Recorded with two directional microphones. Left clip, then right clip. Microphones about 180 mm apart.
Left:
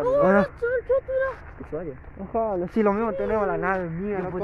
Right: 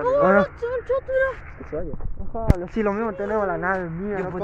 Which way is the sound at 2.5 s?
35° left (ahead or behind).